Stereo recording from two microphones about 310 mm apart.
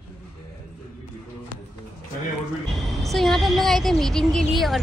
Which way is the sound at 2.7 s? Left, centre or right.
Centre.